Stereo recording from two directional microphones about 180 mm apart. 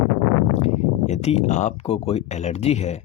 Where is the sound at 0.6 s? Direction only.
40° left (ahead or behind).